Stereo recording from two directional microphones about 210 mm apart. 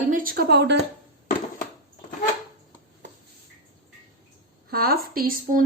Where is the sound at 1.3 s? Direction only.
40° left (ahead or behind).